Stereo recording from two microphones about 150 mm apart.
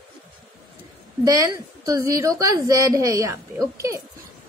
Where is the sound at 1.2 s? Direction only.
20° right (ahead or behind).